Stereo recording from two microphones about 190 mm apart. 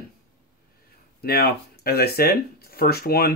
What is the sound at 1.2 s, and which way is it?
Speech, 55° left (ahead or behind).